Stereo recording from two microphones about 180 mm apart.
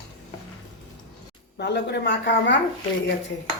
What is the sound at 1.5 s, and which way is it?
A woman's voice, 65° left (ahead or behind).